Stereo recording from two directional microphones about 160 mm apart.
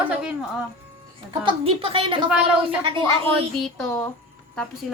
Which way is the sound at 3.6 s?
10° left (ahead or behind).